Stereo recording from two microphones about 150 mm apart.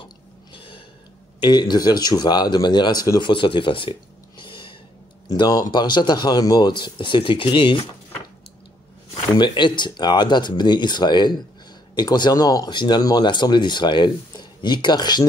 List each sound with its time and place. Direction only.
0.0 s burping: 35° left (ahead or behind)
1.4 s speech: 30° left (ahead or behind)
9.4 s speech: 30° left (ahead or behind)